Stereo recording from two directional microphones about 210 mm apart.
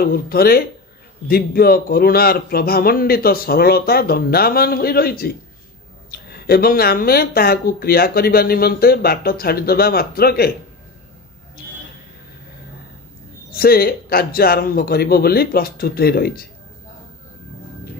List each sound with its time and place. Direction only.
0.0 s speech: 45° left (ahead or behind)
13.5 s speech: 45° left (ahead or behind)